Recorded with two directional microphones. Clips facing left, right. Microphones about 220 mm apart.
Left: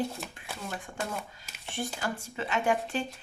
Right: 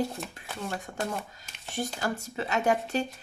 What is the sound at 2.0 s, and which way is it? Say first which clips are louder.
Speech: right 3 dB; 40° right (ahead or behind).